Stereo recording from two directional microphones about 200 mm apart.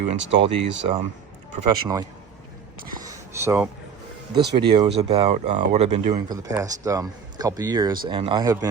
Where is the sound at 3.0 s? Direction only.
15° right (ahead or behind).